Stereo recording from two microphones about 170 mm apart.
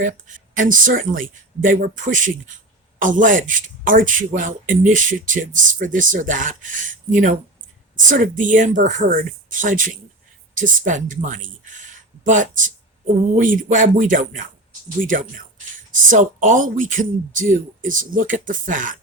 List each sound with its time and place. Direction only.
0.0 s a man's voice: 50° right (ahead or behind)